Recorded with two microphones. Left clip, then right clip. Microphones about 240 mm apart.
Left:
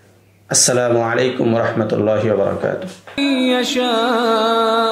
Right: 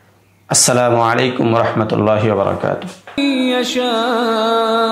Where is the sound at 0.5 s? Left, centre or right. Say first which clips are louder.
Right 2 dB; right.